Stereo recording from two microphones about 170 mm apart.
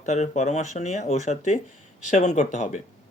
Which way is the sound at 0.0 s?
45° left (ahead or behind).